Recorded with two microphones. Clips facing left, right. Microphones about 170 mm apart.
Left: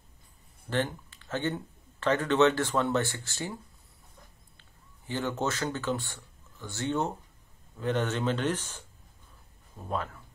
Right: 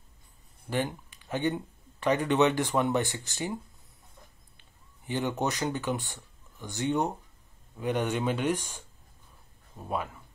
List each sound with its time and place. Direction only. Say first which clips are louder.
0.7 s speech: even; 10° right (ahead or behind)
4.6 s a man's voice: left 1 dB; 15° right (ahead or behind)